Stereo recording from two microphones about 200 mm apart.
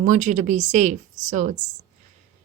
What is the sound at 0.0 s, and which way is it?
A woman's voice, 40° right (ahead or behind).